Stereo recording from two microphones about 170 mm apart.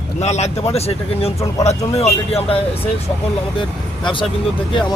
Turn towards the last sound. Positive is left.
turn(degrees=30)  # may be behind; listen again after turning